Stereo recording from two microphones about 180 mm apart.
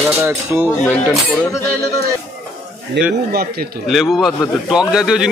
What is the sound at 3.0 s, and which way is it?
Speech, 75° right (ahead or behind).